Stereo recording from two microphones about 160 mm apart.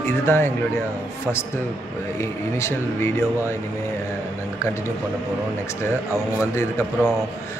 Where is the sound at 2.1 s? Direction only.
15° left (ahead or behind).